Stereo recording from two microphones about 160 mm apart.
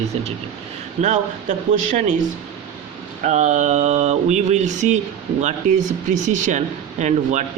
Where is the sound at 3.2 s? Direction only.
50° right (ahead or behind).